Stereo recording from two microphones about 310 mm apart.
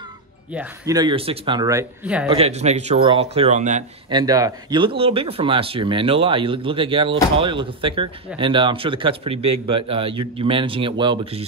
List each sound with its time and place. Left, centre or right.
0.5 s speech: centre
2.2 s speech: centre